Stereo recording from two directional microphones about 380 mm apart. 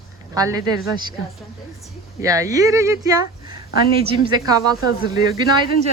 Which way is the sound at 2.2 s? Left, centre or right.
Centre.